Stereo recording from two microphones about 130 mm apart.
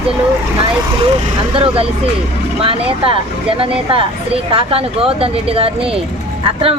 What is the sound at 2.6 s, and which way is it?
A woman's voice, 45° right (ahead or behind).